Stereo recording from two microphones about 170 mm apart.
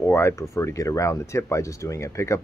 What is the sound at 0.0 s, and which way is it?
Speech, 15° left (ahead or behind).